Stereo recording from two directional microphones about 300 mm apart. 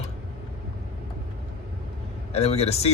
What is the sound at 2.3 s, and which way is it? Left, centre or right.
Speech, centre.